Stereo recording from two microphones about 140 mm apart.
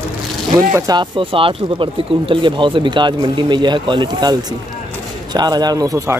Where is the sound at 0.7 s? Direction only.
30° right (ahead or behind).